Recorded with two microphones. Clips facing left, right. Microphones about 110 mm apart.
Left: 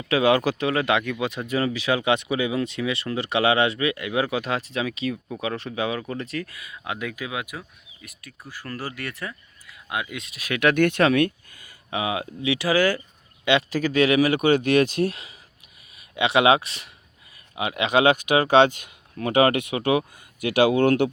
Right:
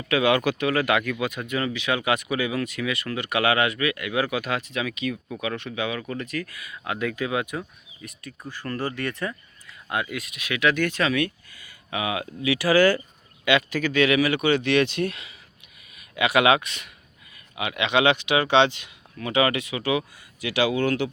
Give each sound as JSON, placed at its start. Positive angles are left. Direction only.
{"t": 0.1, "sound": "speech", "side_deg": 30}
{"t": 6.9, "sound": "speech", "side_deg": 10}
{"t": 10.2, "sound": "speech", "side_deg": 35}
{"t": 11.9, "sound": "speech", "side_deg": 25}
{"t": 13.4, "sound": "speech", "side_deg": 30}
{"t": 16.0, "sound": "speech", "side_deg": 25}